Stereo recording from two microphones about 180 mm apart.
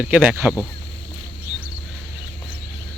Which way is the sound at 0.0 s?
5° right (ahead or behind).